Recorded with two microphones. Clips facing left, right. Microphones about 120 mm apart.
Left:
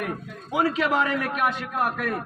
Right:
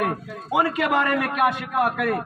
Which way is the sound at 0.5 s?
60° right (ahead or behind).